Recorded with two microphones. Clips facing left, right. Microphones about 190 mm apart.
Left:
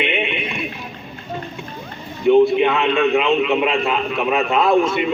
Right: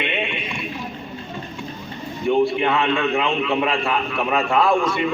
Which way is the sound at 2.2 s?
20° left (ahead or behind).